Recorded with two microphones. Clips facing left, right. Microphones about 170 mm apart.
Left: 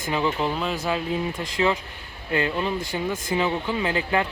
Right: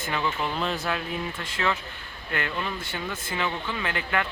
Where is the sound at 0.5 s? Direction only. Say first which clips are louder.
Left 2 dB; 5° left (ahead or behind).